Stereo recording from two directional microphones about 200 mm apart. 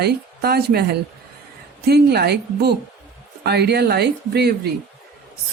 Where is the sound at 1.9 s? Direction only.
55° right (ahead or behind).